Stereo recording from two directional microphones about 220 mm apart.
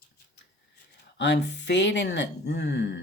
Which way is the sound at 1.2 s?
50° left (ahead or behind).